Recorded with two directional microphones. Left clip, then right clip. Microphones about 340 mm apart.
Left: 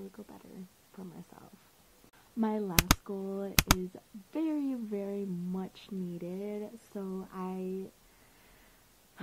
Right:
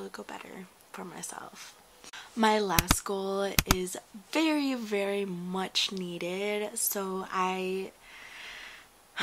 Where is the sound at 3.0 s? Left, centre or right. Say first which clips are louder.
Right 7 dB; centre.